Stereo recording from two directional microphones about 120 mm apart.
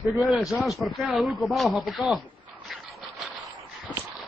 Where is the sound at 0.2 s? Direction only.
Centre (ahead or behind).